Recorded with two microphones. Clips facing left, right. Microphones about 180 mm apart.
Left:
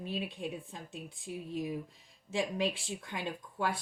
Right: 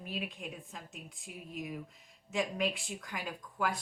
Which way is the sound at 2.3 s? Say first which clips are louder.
Left 1 dB; 30° left (ahead or behind).